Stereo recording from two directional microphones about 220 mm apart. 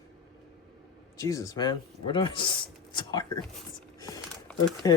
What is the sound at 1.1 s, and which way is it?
Speech, 15° left (ahead or behind).